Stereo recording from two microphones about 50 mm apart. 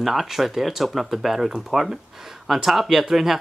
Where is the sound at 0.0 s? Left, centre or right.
Centre.